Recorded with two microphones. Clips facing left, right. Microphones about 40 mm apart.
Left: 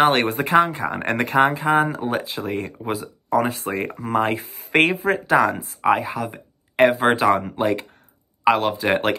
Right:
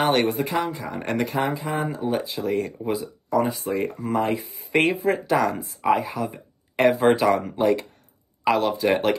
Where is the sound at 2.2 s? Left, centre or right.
Left.